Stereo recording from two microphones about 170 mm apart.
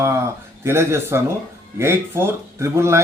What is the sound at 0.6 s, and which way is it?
Speech, 15° right (ahead or behind).